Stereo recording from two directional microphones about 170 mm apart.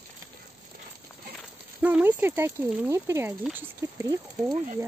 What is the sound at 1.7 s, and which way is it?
Speech, 10° right (ahead or behind).